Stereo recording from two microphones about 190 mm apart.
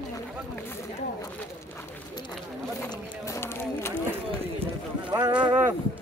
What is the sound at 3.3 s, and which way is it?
Run, 15° left (ahead or behind).